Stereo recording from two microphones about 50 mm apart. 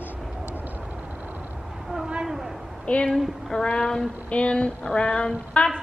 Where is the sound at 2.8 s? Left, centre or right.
Left.